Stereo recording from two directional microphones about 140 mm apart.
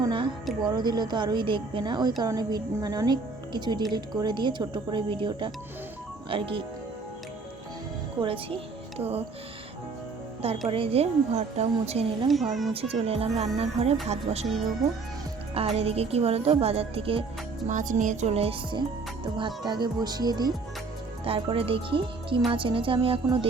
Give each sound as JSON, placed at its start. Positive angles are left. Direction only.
{"t": 0.0, "sound": "music", "side_deg": -35}
{"t": 0.6, "sound": "a woman's voice", "side_deg": -30}
{"t": 8.2, "sound": "speech", "side_deg": -40}
{"t": 10.7, "sound": "speech", "side_deg": -40}
{"t": 12.3, "sound": "speech", "side_deg": 0}
{"t": 12.7, "sound": "speech", "side_deg": -45}
{"t": 15.5, "sound": "speech", "side_deg": -45}
{"t": 17.7, "sound": "speech", "side_deg": -60}
{"t": 21.2, "sound": "speech", "side_deg": -40}